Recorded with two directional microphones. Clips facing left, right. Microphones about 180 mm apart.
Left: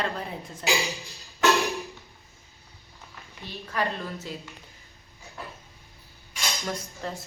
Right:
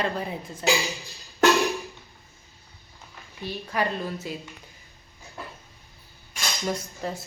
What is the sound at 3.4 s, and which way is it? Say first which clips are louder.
Speech: right 2 dB; 15° right (ahead or behind).